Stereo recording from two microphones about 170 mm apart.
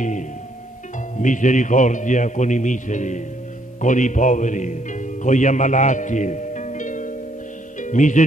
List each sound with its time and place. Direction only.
0.0 s music: 45° left (ahead or behind)
0.9 s a man's voice: 50° left (ahead or behind)